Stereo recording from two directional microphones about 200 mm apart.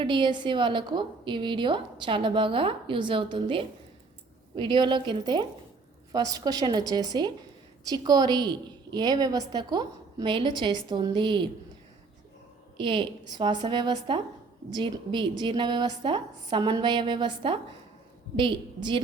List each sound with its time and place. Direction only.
0.0 s a woman's voice: 25° right (ahead or behind)
12.7 s a woman's voice: 25° right (ahead or behind)